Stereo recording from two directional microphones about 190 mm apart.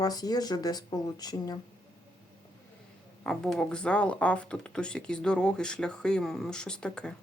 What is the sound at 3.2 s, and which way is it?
Speech, 5° left (ahead or behind).